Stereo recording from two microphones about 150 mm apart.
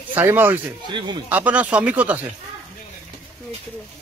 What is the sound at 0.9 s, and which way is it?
Speech, 30° right (ahead or behind).